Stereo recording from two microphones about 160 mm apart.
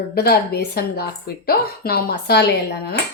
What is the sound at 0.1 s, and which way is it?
Speech, 80° left.